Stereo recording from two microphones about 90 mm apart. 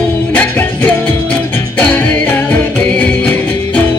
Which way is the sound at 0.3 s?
20° left (ahead or behind).